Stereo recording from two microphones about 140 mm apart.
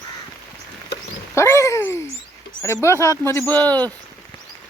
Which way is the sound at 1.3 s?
20° left (ahead or behind).